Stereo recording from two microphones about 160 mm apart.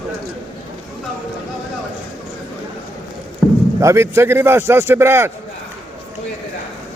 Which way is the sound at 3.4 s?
15° right (ahead or behind).